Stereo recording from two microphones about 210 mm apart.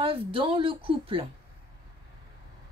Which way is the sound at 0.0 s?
25° right (ahead or behind).